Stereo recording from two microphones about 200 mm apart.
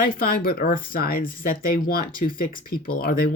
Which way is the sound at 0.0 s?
45° left (ahead or behind).